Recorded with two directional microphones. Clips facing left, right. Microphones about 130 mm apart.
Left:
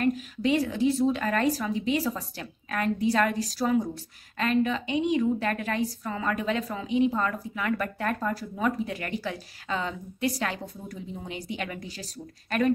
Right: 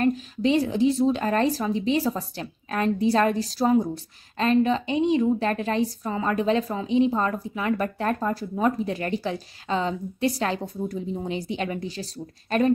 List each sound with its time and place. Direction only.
0.0 s a woman's voice: 30° right (ahead or behind)